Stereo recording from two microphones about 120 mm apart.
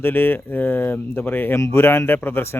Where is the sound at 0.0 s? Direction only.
20° left (ahead or behind).